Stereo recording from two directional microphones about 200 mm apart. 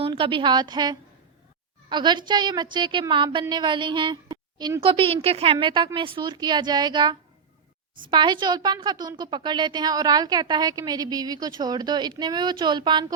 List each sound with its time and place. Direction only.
0.0 s a woman's voice: 25° right (ahead or behind)